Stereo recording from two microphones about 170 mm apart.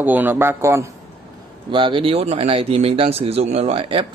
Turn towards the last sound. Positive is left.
turn(degrees=-30)  # may be behind; listen again after turning